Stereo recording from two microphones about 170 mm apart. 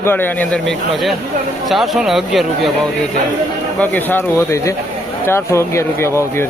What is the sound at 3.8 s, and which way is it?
Speech, 10° left (ahead or behind).